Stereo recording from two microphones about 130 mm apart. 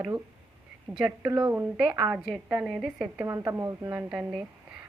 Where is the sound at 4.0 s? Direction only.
10° right (ahead or behind).